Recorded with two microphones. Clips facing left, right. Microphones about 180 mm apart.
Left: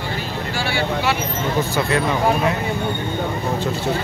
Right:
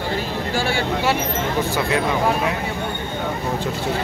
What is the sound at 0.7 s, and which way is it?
Vehicle, 45° right (ahead or behind).